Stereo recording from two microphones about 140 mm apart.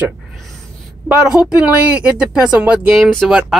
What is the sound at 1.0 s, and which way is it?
Speech, 5° right (ahead or behind).